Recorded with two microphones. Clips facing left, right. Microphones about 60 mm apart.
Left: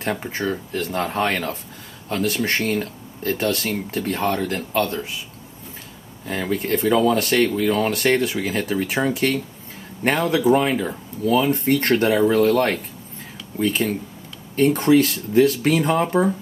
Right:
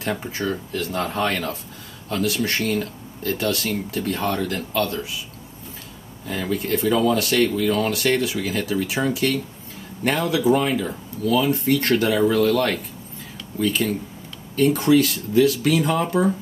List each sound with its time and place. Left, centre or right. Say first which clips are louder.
0.0 s speech: left 1 dB; left
6.2 s speech: left 1 dB; left